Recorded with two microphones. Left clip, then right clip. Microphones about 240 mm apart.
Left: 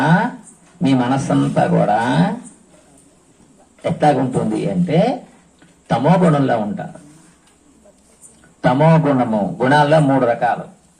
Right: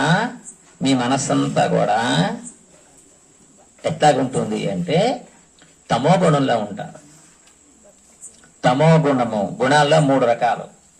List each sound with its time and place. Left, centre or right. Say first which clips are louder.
0.0 s a sound: left 2 dB; right
0.8 s a man's voice: left 2 dB; right
3.8 s a man's voice: even; right
8.6 s a man's voice: left 1 dB; right